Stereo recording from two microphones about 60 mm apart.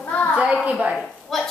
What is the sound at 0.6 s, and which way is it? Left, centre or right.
Speech, right.